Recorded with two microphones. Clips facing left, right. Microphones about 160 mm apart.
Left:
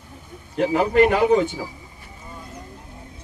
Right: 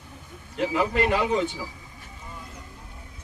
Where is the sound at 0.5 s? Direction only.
45° left (ahead or behind).